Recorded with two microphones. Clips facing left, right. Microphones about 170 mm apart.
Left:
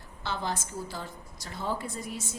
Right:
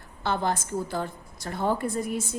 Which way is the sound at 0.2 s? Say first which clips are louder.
Right 6 dB; 55° right (ahead or behind).